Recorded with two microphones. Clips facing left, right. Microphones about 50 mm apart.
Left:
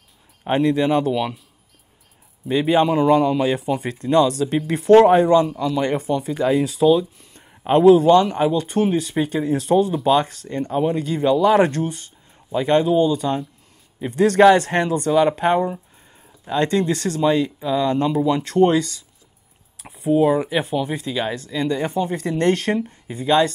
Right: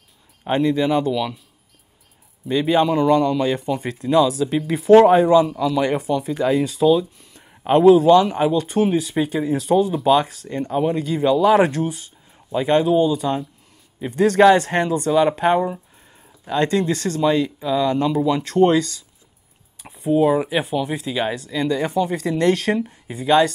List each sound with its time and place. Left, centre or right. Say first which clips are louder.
0.4 s a man's voice: left 1 dB; centre
2.4 s a man's voice: even; centre
21.6 s speech: right 2 dB; left
22.3 s a man's voice: even; centre